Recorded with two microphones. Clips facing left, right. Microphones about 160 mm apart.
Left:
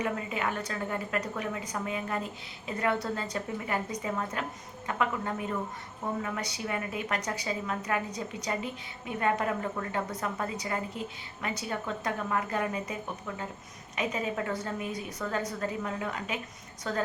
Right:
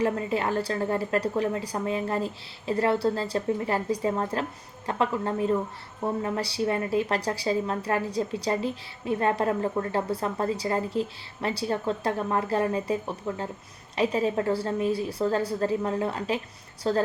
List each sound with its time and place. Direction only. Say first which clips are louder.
0.0 s a woman's voice: right 6 dB; 35° right (ahead or behind)